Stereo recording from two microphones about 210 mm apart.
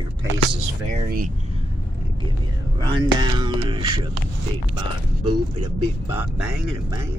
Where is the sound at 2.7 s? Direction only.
20° right (ahead or behind).